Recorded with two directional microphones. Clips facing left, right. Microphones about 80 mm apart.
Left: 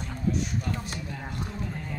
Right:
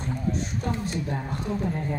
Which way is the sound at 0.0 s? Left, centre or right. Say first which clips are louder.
Right 1 dB; right.